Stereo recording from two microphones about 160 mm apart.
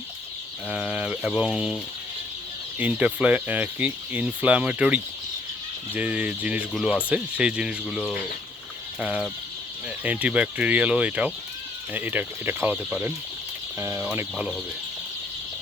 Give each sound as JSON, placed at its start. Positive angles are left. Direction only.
{"t": 0.7, "sound": "speech", "side_deg": -5}
{"t": 14.3, "sound": "speech", "side_deg": 0}